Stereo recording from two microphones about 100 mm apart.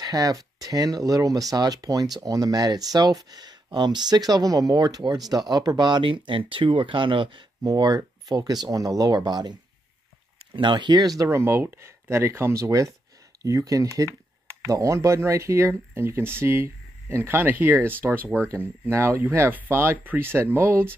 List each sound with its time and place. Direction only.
0.0 s speech: 40° right (ahead or behind); by 7.4 s 55° right (ahead or behind)
7.6 s speech: 45° right (ahead or behind); by 20.9 s 25° right (ahead or behind)